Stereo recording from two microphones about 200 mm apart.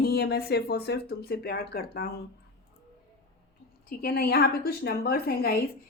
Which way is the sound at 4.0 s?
50° left (ahead or behind).